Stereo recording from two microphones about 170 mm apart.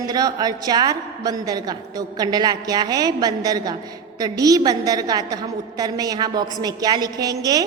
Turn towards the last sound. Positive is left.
turn(degrees=-20)  # may be behind; listen again after turning